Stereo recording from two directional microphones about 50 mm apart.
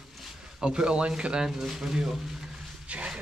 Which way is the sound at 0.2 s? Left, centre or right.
Centre.